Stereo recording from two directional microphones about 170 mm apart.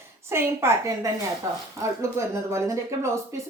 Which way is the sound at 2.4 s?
15° right (ahead or behind).